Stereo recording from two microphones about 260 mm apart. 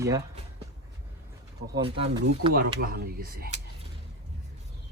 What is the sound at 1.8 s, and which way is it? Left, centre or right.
Speech, centre.